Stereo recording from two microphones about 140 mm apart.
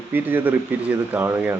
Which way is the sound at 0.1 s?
15° right (ahead or behind).